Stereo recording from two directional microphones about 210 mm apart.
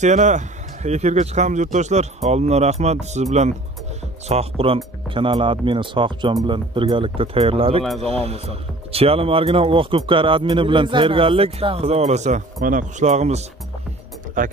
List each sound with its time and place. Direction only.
0.0 s speech: 35° right (ahead or behind)
4.3 s speech: 30° right (ahead or behind)